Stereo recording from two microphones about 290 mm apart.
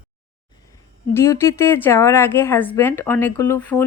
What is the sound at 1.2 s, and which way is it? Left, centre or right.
A woman's voice, centre.